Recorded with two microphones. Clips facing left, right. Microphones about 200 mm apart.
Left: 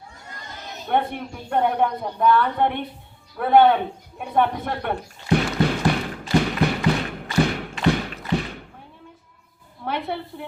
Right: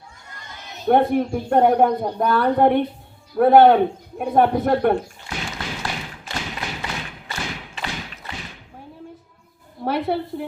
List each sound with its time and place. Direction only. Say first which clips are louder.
0.9 s a woman's voice: right 7 dB; 45° right (ahead or behind)
5.3 s tap: left 11 dB; 55° left (ahead or behind)
9.8 s a sound: right 5 dB; 40° right (ahead or behind)